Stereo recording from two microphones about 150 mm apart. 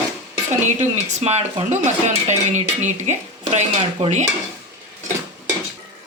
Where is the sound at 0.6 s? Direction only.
50° right (ahead or behind).